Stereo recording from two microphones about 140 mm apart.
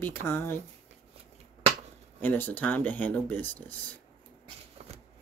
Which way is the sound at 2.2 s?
15° left (ahead or behind).